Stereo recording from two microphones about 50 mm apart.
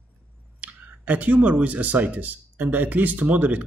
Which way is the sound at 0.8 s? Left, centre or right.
Right.